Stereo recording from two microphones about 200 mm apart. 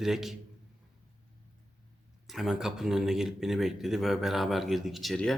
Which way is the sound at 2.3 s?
Centre (ahead or behind).